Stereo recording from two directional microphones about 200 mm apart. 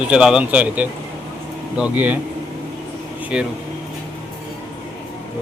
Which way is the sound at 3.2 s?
5° right (ahead or behind).